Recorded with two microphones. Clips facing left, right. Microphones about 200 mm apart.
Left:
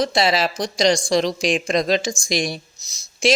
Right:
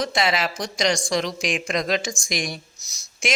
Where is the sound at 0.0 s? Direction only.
35° left (ahead or behind).